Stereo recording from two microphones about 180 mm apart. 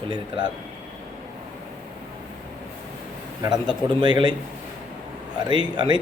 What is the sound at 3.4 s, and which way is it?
Speech, 25° right (ahead or behind).